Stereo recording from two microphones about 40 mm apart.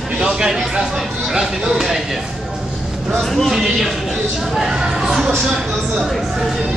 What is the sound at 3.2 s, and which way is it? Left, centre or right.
Speech, centre.